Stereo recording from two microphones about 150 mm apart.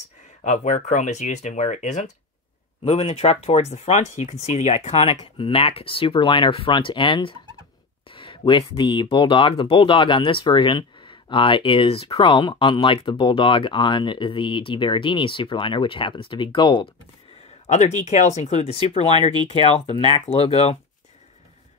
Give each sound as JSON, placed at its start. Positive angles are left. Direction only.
{"t": 0.4, "sound": "speech", "side_deg": 55}
{"t": 17.6, "sound": "speech", "side_deg": 50}